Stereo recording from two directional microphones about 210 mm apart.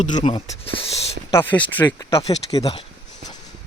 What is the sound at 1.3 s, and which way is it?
Speech, 10° left (ahead or behind).